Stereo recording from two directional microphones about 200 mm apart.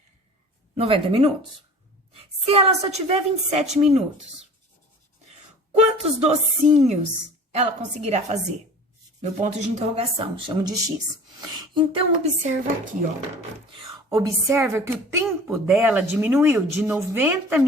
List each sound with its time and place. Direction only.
0.8 s speech: 25° right (ahead or behind)
2.5 s a woman's voice: 30° right (ahead or behind)
5.8 s a woman's voice: 30° right (ahead or behind)
14.1 s speech: 15° right (ahead or behind)